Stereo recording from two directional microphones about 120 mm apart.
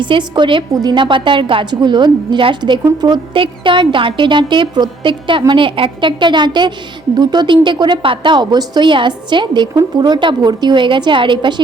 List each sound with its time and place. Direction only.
0.0 s a woman's voice: 40° right (ahead or behind)
3.3 s a woman's voice: 45° right (ahead or behind)